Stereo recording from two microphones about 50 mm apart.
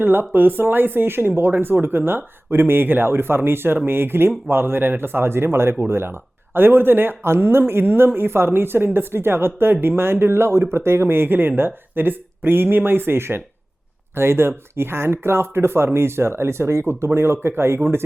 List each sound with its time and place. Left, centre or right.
0.0 s speech: right